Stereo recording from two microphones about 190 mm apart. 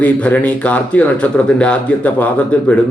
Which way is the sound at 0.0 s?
10° left (ahead or behind).